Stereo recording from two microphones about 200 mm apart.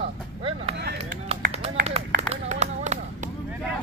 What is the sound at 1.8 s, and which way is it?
Run, 30° right (ahead or behind).